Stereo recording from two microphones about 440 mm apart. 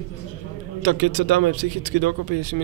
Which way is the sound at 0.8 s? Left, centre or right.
Right.